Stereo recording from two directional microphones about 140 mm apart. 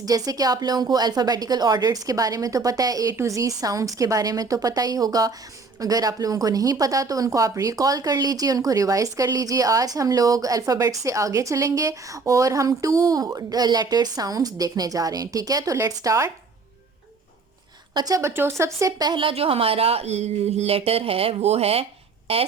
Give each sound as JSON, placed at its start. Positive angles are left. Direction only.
{"t": 0.0, "sound": "speech", "side_deg": -25}
{"t": 17.9, "sound": "speech", "side_deg": -25}